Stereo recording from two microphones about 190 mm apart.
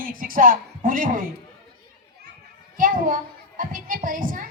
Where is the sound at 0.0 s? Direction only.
45° right (ahead or behind).